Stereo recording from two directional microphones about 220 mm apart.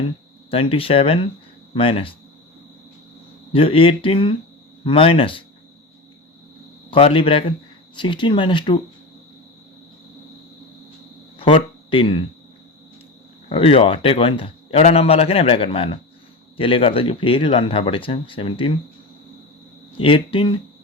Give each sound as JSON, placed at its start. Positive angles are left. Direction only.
{"t": 0.5, "sound": "a man's voice", "side_deg": 25}
{"t": 3.5, "sound": "a man's voice", "side_deg": 25}
{"t": 6.9, "sound": "a man's voice", "side_deg": 25}
{"t": 11.3, "sound": "speech", "side_deg": 25}
{"t": 13.5, "sound": "a man's voice", "side_deg": 25}
{"t": 20.0, "sound": "a man's voice", "side_deg": 25}